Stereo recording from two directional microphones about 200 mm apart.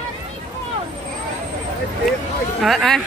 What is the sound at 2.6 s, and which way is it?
Speech, centre (ahead or behind).